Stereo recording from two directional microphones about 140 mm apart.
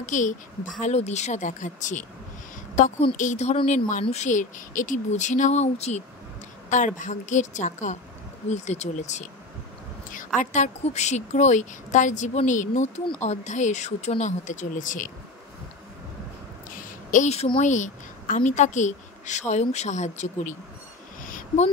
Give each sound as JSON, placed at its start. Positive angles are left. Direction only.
{"t": 0.0, "sound": "a woman's voice", "side_deg": 60}
{"t": 3.2, "sound": "a woman's voice", "side_deg": 55}
{"t": 17.1, "sound": "a woman's voice", "side_deg": 55}
{"t": 21.2, "sound": "a sound", "side_deg": 70}